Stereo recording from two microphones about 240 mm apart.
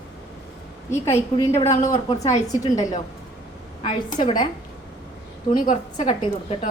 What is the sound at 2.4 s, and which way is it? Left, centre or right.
A woman's voice, centre.